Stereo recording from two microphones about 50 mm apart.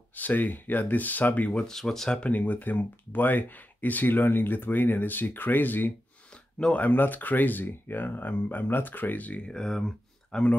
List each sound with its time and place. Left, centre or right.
0.1 s speech: left
1.7 s speech: centre
2.1 s speech: left
6.3 s a sound: left
6.8 s speech: left
9.5 s speech: centre